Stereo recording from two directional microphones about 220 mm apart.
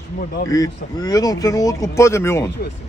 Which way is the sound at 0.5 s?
15° left (ahead or behind).